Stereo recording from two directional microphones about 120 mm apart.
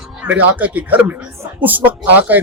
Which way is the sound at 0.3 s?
15° right (ahead or behind).